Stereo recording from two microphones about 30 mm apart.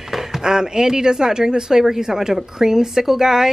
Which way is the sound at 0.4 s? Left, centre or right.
Right.